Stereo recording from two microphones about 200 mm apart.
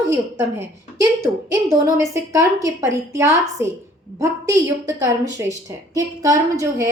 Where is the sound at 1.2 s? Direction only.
15° right (ahead or behind).